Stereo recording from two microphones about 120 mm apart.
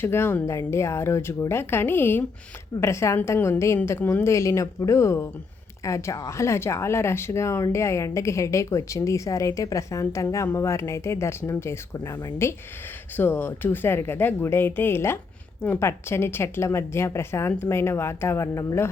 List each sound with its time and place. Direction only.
0.0 s speech: 20° left (ahead or behind)